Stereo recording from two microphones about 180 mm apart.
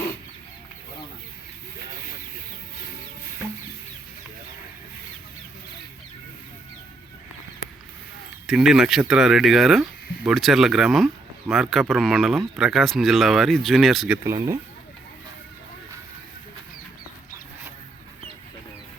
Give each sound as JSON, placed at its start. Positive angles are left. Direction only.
{"t": 8.4, "sound": "speech", "side_deg": 0}
{"t": 14.3, "sound": "speech", "side_deg": -15}